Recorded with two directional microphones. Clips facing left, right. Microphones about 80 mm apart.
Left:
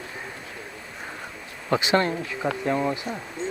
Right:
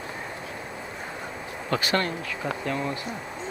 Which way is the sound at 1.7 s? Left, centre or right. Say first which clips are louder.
Left 4 dB; centre.